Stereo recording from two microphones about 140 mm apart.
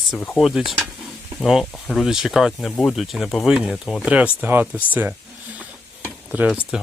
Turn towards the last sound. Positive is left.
turn(degrees=-5)  # may be behind; listen again after turning